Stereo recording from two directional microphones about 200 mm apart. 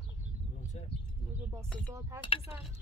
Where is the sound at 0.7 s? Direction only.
35° left (ahead or behind).